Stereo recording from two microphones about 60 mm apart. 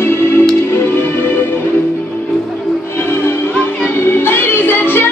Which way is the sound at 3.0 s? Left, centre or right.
Left.